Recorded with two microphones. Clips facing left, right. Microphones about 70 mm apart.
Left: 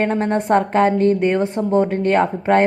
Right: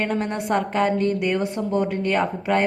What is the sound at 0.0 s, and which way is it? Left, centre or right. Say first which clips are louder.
A woman's voice: left 6 dB; left.